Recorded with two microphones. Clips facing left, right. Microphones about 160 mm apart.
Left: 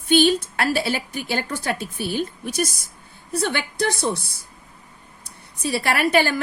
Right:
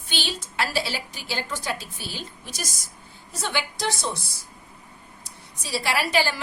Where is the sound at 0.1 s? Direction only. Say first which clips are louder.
Left 15 dB; 55° left (ahead or behind).